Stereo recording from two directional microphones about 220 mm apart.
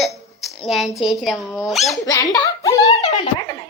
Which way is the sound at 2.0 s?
15° left (ahead or behind).